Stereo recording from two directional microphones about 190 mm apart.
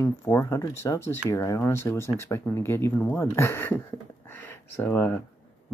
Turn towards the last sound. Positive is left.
turn(degrees=10)  # may be behind; listen again after turning